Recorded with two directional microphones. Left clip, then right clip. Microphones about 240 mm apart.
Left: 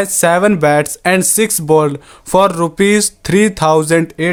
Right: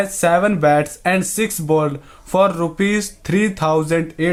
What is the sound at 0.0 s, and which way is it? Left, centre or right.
Speech, left.